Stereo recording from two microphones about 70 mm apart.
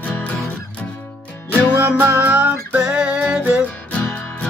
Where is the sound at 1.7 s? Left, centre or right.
Right.